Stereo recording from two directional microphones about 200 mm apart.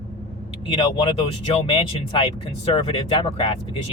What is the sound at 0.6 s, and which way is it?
Speech, 30° left (ahead or behind).